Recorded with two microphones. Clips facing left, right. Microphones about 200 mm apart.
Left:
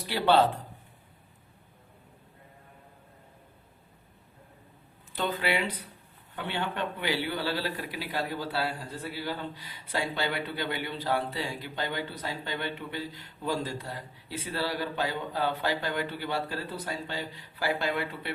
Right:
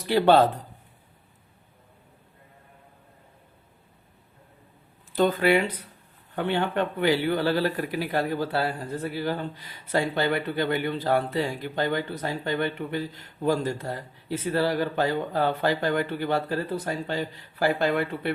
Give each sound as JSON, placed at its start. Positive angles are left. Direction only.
{"t": 0.1, "sound": "speech", "side_deg": -45}
{"t": 5.1, "sound": "speech", "side_deg": -45}